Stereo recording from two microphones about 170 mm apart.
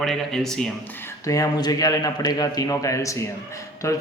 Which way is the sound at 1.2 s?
20° left (ahead or behind).